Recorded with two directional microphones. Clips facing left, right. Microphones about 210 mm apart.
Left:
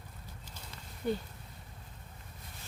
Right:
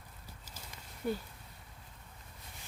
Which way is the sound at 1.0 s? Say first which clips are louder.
Left 2 dB; 5° right (ahead or behind).